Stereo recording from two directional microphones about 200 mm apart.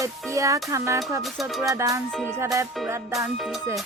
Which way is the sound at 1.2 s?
Centre (ahead or behind).